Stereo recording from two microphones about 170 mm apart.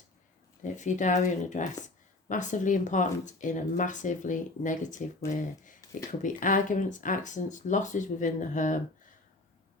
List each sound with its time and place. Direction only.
0.6 s speech: 45° left (ahead or behind)